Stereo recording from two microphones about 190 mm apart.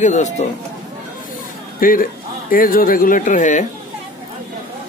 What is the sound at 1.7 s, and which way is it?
Speech, 45° left (ahead or behind).